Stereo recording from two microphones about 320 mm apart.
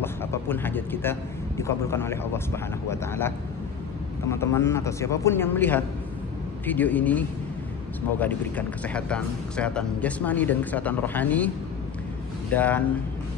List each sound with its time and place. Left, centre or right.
0.0 s a sound: centre
1.6 s speech: centre
12.5 s speech: centre